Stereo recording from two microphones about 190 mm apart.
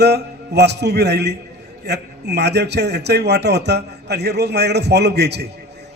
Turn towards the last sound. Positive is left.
turn(degrees=-60)  # may be behind; listen again after turning